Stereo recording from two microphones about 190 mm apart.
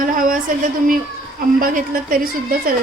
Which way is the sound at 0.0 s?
45° right (ahead or behind).